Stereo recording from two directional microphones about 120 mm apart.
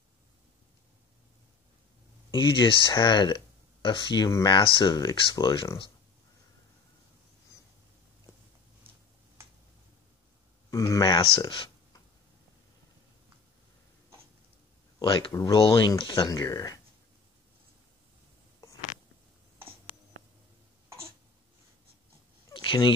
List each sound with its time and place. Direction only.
2.3 s speech: 40° left (ahead or behind)
10.7 s a sound: 25° left (ahead or behind)
11.3 s a sound: 45° left (ahead or behind)
15.0 s speech: 45° left (ahead or behind)
15.3 s speech: 30° left (ahead or behind)
15.6 s speech: 45° left (ahead or behind)
22.5 s cat: 40° left (ahead or behind)